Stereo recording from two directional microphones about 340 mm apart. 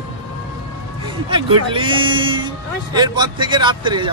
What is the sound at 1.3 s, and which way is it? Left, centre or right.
Speech, centre.